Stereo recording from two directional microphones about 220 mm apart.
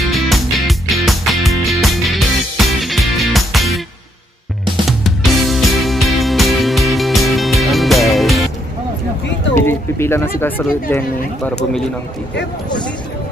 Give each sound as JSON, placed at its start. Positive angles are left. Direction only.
{"t": 0.1, "sound": "music", "side_deg": 0}
{"t": 4.8, "sound": "music", "side_deg": 0}
{"t": 9.7, "sound": "a sound", "side_deg": 10}
{"t": 10.4, "sound": "speech", "side_deg": 10}